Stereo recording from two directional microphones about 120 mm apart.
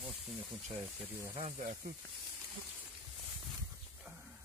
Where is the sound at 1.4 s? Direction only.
70° right (ahead or behind).